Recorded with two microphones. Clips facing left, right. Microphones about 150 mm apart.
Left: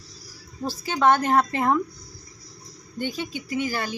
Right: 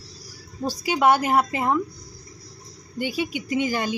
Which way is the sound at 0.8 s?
10° right (ahead or behind).